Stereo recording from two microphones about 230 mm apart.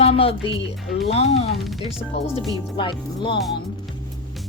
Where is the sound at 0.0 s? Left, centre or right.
Left.